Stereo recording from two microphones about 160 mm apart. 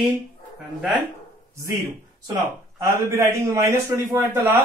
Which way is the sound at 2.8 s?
15° right (ahead or behind).